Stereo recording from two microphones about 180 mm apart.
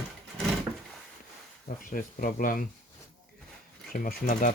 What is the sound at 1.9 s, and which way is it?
Speech, 50° left (ahead or behind).